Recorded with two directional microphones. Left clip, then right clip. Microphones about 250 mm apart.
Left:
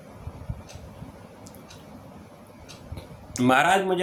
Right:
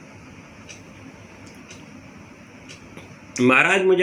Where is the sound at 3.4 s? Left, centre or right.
Left.